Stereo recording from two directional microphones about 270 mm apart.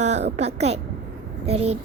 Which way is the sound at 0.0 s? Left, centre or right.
Right.